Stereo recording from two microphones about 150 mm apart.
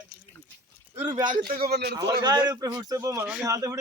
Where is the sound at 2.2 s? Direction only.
25° right (ahead or behind).